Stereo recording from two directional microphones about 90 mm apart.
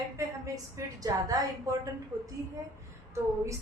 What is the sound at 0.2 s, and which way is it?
A woman's voice, 40° right (ahead or behind).